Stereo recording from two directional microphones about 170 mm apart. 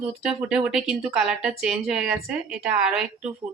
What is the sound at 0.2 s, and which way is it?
A woman's voice, 5° right (ahead or behind).